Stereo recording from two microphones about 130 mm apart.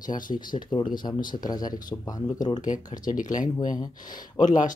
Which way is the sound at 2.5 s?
80° left.